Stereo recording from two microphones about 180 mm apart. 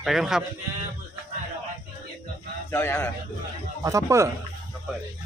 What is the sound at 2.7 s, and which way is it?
Speech, 15° left (ahead or behind).